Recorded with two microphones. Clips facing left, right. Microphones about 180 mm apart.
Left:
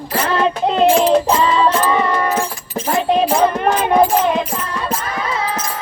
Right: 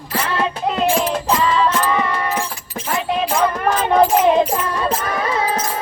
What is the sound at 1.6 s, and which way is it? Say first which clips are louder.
Music: left 3 dB; 30° left (ahead or behind).